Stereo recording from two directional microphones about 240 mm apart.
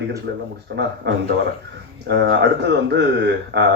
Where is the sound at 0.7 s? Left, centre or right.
Right.